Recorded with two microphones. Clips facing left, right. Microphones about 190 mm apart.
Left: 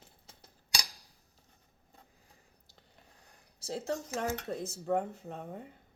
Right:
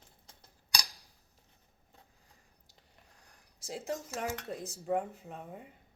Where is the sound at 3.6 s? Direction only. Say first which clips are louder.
Left 4 dB; 35° left (ahead or behind).